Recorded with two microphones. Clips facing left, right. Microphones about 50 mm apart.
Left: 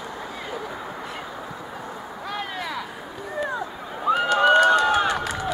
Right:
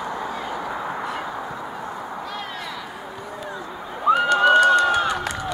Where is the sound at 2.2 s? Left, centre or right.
Centre.